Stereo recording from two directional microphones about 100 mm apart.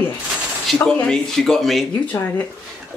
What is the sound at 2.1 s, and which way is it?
Speech, 20° left (ahead or behind).